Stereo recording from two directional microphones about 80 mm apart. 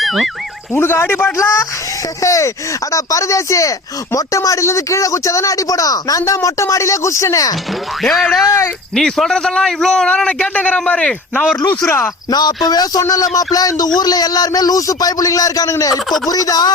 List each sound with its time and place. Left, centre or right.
0.0 s music: centre
0.8 s a man's voice: left
8.0 s speech: centre
8.4 s speech: left
9.0 s a man's voice: centre
11.8 s a man's voice: left
12.3 s speech: left